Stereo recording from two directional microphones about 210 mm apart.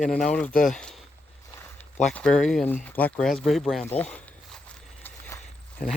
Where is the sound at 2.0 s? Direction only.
5° left (ahead or behind).